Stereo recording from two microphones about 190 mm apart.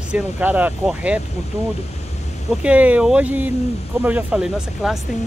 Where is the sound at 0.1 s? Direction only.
10° right (ahead or behind).